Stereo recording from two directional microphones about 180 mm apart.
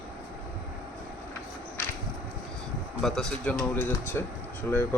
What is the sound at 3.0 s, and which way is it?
Speech, centre (ahead or behind).